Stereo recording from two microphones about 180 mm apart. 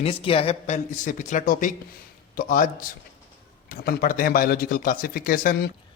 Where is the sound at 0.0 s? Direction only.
30° left (ahead or behind); by 5.7 s 55° left (ahead or behind).